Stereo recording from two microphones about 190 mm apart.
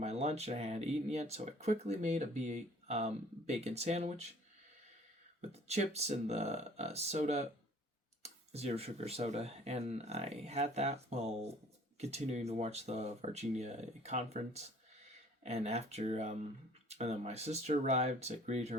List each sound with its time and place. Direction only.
0.0 s speech: 35° right (ahead or behind)
5.5 s speech: 35° right (ahead or behind)